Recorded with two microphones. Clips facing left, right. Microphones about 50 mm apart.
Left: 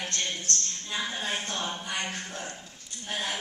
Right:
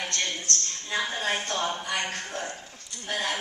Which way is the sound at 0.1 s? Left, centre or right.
Right.